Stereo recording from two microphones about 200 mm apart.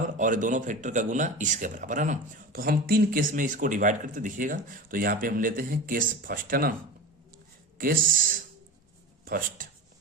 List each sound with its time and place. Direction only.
0.2 s speech: 40° right (ahead or behind)
7.8 s speech: 45° right (ahead or behind)